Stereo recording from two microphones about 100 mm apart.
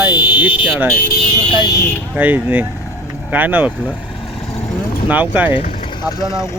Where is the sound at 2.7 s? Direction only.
30° left (ahead or behind).